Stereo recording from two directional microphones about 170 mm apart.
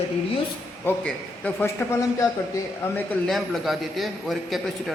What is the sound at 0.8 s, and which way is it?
A man's voice, 10° left (ahead or behind).